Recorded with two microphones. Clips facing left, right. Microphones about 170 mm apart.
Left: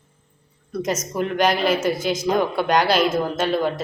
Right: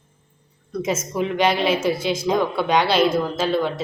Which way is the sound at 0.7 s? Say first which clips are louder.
Even; centre (ahead or behind).